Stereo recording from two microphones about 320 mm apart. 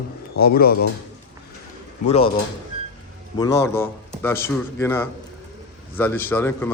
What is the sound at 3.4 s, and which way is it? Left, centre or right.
A man's voice, centre.